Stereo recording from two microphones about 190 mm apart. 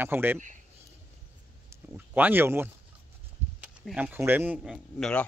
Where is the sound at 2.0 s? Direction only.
10° right (ahead or behind).